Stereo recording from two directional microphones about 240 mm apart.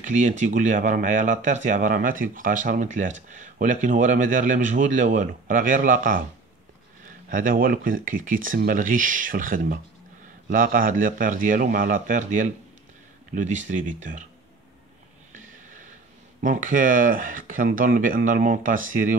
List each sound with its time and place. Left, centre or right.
0.0 s speech: right
7.2 s speech: right
15.3 s snort: right
16.3 s speech: right